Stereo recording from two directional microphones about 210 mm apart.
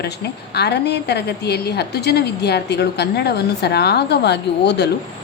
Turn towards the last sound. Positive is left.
turn(degrees=55)  # may be behind; listen again after turning